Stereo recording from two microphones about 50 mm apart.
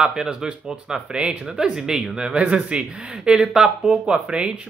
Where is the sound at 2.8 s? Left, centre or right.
Centre.